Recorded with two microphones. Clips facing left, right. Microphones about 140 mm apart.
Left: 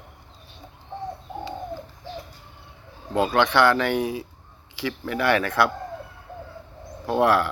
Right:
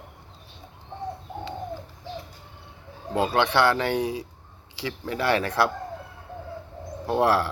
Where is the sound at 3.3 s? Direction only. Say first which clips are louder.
Left 2 dB; 30° right (ahead or behind).